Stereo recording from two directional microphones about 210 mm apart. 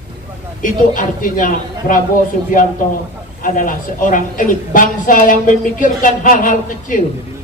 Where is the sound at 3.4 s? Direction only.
40° left (ahead or behind).